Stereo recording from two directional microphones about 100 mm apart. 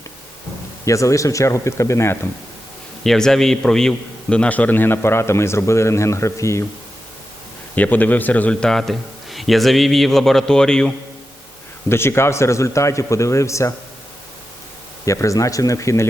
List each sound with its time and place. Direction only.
0.9 s speech: 30° left (ahead or behind)
3.0 s a man's voice: 5° left (ahead or behind); by 6.7 s 30° left (ahead or behind)
7.8 s a man's voice: 15° left (ahead or behind)
11.9 s a man's voice: 25° left (ahead or behind)
15.0 s speech: 30° left (ahead or behind)